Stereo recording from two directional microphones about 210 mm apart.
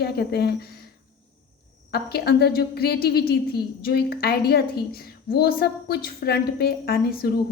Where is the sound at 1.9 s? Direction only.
50° left (ahead or behind).